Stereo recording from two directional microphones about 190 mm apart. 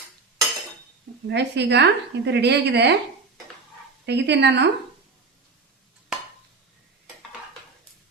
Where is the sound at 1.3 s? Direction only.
65° right (ahead or behind).